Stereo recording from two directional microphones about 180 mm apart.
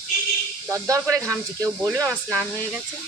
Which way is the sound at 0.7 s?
15° right (ahead or behind).